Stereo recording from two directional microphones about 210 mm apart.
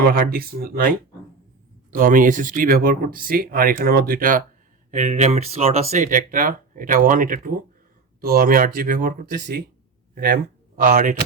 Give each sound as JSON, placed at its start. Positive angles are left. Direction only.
{"t": 0.0, "sound": "speech", "side_deg": -45}